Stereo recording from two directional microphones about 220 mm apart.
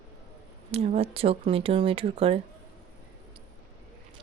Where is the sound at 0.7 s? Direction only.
30° right (ahead or behind).